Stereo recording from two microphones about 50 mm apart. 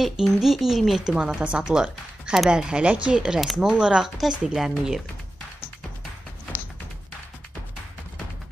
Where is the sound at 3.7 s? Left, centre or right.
Centre.